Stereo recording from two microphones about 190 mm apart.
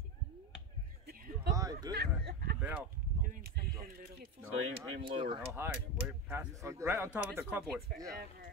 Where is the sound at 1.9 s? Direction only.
55° right (ahead or behind).